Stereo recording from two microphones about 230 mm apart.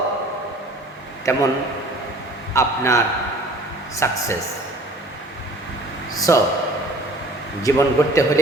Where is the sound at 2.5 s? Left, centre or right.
Centre.